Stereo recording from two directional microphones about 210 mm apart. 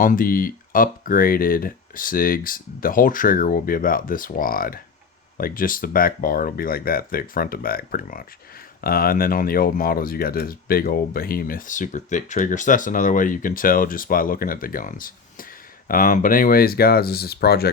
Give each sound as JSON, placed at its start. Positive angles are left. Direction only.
{"t": 0.0, "sound": "speech", "side_deg": 40}